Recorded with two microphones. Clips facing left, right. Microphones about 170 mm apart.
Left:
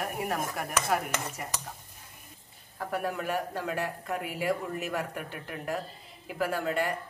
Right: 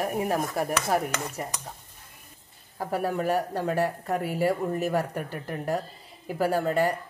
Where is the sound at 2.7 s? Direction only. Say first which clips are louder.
Right 5 dB; 35° right (ahead or behind).